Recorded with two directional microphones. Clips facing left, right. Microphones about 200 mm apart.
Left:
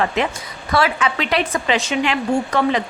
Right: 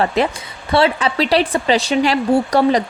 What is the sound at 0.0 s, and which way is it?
A woman's voice, 35° right (ahead or behind).